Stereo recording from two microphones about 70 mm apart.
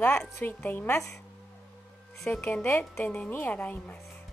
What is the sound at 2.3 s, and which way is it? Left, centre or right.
Speech, left.